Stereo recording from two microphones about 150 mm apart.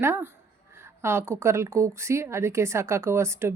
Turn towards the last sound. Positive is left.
turn(degrees=-15)  # may be behind; listen again after turning